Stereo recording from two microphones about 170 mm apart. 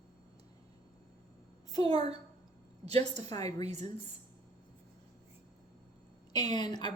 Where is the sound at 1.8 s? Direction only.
35° right (ahead or behind).